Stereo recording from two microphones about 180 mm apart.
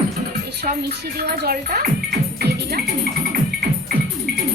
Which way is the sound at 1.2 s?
60° right (ahead or behind).